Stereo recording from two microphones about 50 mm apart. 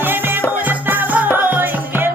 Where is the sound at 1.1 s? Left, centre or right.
Right.